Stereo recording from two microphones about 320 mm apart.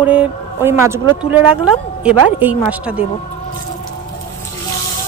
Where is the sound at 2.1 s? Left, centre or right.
Centre.